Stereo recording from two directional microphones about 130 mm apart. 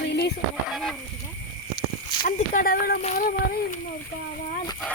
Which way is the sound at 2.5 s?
90° left.